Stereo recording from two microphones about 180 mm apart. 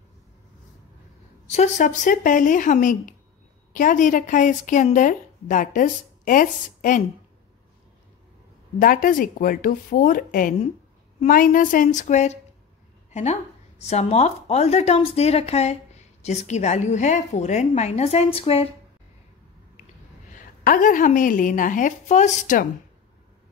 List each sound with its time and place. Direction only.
1.5 s a woman's voice: 40° left (ahead or behind)
8.7 s a woman's voice: 50° left (ahead or behind); by 18.7 s 35° left (ahead or behind)
20.6 s a woman's voice: 50° left (ahead or behind)